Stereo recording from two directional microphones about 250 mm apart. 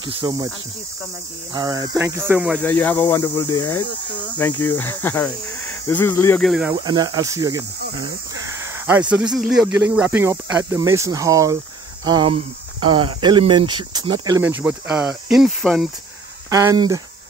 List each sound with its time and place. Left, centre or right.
0.0 s speech: centre
1.5 s speech: centre
2.6 s speech: centre
6.8 s speech: centre
16.4 s speech: centre